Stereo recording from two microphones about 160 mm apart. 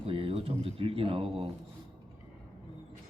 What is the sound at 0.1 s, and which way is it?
Speech, 35° right (ahead or behind).